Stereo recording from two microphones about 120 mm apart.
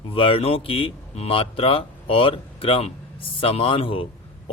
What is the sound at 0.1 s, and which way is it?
A man's voice, 50° left (ahead or behind).